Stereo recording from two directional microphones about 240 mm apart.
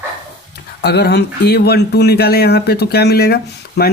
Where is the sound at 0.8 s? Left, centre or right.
Left.